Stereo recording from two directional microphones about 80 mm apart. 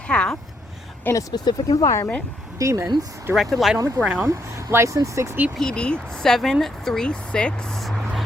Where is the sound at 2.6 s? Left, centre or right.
Right.